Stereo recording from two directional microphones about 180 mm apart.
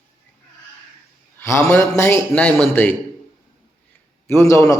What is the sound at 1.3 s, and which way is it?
A man's voice, 10° left (ahead or behind).